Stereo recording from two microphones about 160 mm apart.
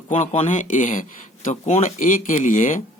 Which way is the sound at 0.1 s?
50° left (ahead or behind).